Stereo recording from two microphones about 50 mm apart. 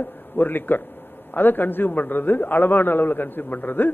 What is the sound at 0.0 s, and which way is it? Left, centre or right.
A man's voice, left.